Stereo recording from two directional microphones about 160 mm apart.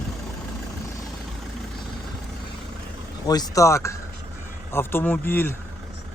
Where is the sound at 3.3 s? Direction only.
20° left (ahead or behind).